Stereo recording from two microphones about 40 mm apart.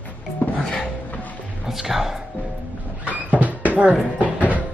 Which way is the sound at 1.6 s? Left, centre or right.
Centre.